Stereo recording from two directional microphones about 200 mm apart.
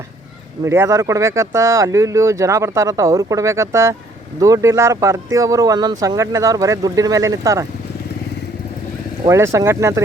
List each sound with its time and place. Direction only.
0.6 s speech: 15° right (ahead or behind)
9.2 s speech: 15° right (ahead or behind)